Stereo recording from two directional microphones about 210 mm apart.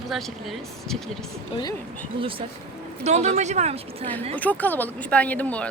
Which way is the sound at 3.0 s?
35° right (ahead or behind).